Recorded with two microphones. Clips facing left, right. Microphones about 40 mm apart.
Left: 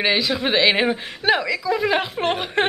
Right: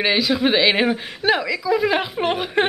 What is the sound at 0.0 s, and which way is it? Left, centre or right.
Speech, centre.